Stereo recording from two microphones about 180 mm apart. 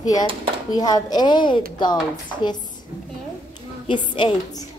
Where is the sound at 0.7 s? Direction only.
20° left (ahead or behind).